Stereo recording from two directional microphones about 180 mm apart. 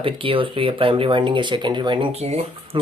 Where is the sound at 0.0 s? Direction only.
30° right (ahead or behind).